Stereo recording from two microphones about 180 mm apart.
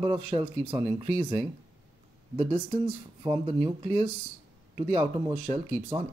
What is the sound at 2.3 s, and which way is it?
Speech, 30° right (ahead or behind).